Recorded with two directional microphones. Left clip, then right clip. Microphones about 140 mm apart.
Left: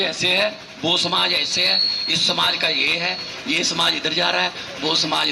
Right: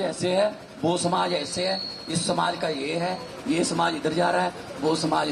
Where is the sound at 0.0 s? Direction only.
50° right (ahead or behind).